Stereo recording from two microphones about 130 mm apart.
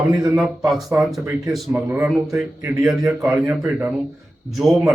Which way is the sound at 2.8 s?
5° right (ahead or behind).